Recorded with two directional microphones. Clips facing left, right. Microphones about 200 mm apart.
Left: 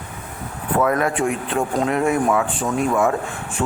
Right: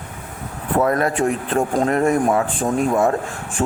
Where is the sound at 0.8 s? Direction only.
40° right (ahead or behind).